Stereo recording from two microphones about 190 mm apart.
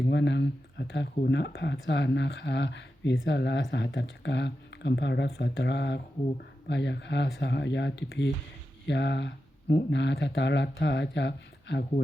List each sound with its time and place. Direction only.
0.1 s speech: 65° left (ahead or behind)